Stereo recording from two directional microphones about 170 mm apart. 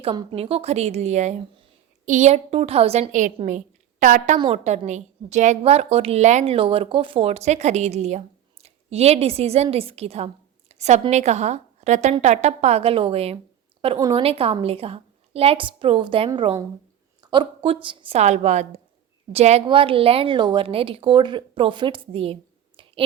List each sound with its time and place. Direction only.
0.0 s a woman's voice: 30° right (ahead or behind); by 4.4 s 45° right (ahead or behind)
4.4 s a woman's voice: 35° right (ahead or behind)
10.7 s a sound: 40° right (ahead or behind)
11.1 s a woman's voice: 40° right (ahead or behind)
22.8 s chewing: 30° right (ahead or behind)